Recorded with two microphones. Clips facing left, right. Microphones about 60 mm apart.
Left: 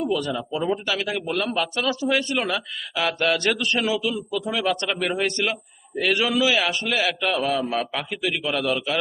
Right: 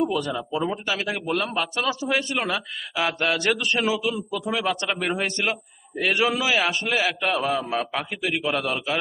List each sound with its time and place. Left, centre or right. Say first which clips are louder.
0.3 s speech: left 1 dB; centre
0.9 s a man's voice: even; centre